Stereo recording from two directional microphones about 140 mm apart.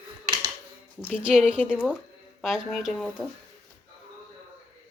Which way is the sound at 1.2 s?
5° right (ahead or behind).